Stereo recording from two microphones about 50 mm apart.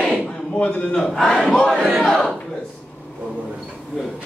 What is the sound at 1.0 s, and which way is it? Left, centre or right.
Battle cry, centre.